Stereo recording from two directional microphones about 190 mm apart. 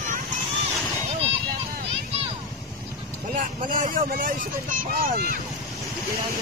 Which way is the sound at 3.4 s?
45° right (ahead or behind).